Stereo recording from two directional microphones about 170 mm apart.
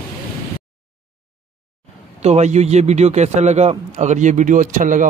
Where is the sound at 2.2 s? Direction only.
40° right (ahead or behind).